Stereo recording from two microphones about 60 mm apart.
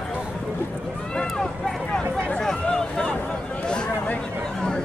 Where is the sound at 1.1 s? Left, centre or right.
Centre.